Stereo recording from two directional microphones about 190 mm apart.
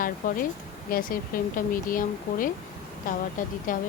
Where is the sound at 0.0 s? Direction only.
45° left (ahead or behind).